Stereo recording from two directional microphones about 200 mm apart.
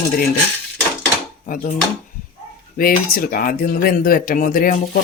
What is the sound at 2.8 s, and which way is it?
Speech, 45° left (ahead or behind).